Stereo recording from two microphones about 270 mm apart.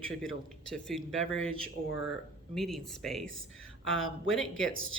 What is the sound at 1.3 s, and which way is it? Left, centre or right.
Speech, left.